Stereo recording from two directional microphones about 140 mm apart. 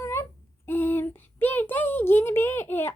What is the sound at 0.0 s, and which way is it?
Speech, 20° left (ahead or behind).